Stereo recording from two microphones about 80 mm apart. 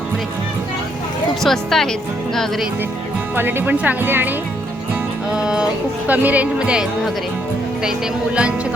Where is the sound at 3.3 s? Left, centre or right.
Right.